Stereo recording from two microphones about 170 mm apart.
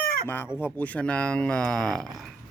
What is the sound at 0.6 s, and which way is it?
Speech, 10° left (ahead or behind).